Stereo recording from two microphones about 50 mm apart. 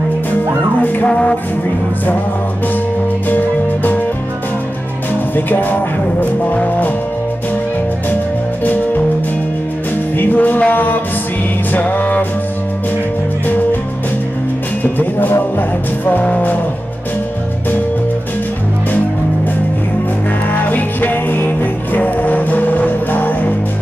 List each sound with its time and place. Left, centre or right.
1.0 s music: left
3.3 s music: left
5.3 s music: left
10.1 s music: left
14.8 s music: left
16.3 s music: left
20.7 s music: left